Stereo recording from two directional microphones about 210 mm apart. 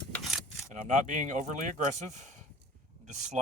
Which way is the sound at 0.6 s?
35° right (ahead or behind).